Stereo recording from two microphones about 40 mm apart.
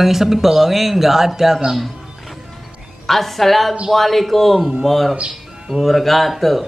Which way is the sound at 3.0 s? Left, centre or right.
Centre.